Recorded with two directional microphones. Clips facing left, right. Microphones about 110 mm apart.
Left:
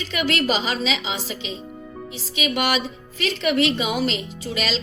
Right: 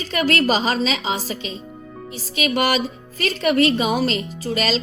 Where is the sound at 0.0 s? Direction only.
40° right (ahead or behind).